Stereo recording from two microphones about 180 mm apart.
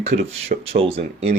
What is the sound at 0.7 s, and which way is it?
Speech, 35° right (ahead or behind).